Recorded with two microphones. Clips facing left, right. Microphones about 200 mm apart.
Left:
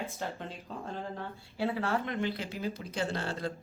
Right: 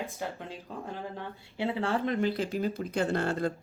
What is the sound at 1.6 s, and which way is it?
Speech, 25° right (ahead or behind).